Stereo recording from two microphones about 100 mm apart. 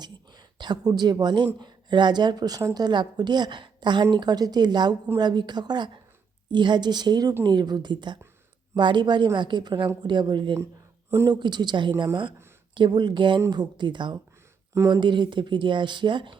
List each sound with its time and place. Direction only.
0.0 s a sound: 45° right (ahead or behind)
1.5 s speech: 50° right (ahead or behind)
2.8 s speech: 45° right (ahead or behind)